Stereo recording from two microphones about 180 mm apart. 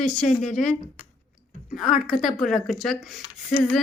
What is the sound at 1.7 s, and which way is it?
Speech, centre (ahead or behind).